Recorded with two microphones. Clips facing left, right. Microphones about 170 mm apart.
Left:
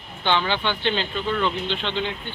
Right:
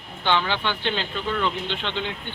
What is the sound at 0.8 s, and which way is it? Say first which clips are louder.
Speech: left 2 dB; 5° right (ahead or behind).